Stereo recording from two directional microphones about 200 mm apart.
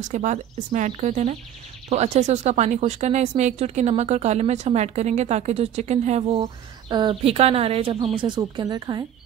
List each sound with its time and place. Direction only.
0.0 s speech: 40° right (ahead or behind); by 9.0 s 20° right (ahead or behind)